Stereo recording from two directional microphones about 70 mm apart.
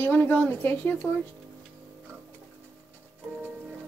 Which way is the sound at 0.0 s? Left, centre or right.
Left.